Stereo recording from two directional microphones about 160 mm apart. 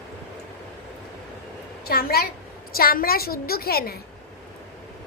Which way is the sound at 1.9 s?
70° left (ahead or behind).